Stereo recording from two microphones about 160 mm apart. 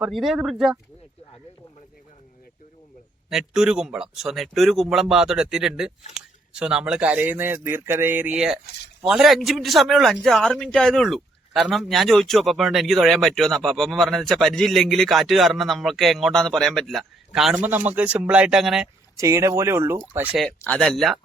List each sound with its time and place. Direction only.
0.0 s a man's voice: centre (ahead or behind)
3.2 s a man's voice: 5° right (ahead or behind)
19.1 s speech: 20° right (ahead or behind)
20.6 s a man's voice: 5° left (ahead or behind)